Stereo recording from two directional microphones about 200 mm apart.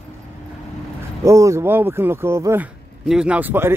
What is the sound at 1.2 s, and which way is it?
Speech, 15° right (ahead or behind).